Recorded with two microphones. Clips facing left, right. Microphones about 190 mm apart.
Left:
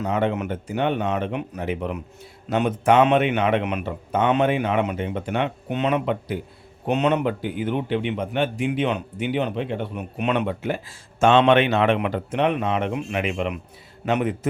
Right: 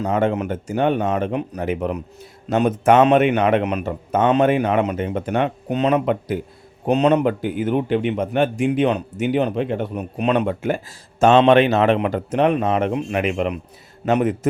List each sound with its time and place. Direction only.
0.1 s a man's voice: 45° right (ahead or behind)